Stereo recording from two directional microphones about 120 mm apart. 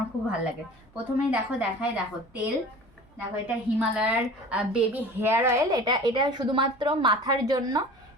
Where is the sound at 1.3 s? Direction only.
10° right (ahead or behind).